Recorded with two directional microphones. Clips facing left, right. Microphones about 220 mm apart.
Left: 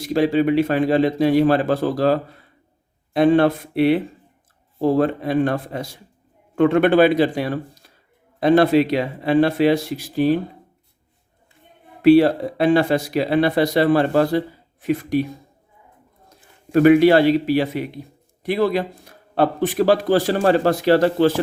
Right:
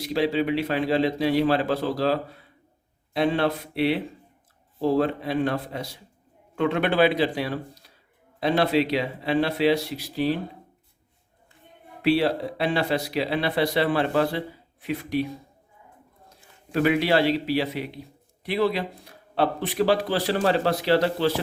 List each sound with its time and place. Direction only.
0.0 s speech: 50° left (ahead or behind)
12.0 s speech: 50° left (ahead or behind)
16.7 s speech: 50° left (ahead or behind)